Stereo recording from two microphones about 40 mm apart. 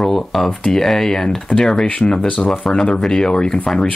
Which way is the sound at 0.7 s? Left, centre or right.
Centre.